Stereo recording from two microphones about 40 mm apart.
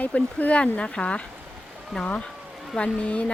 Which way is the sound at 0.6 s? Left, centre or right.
Left.